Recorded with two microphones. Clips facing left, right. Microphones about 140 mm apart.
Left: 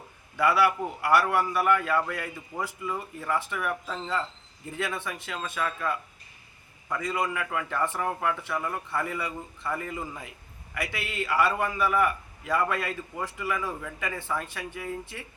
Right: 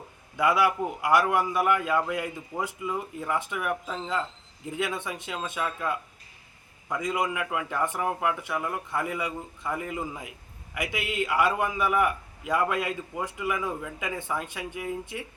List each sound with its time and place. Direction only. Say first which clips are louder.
0.3 s a man's voice: even; 15° right (ahead or behind)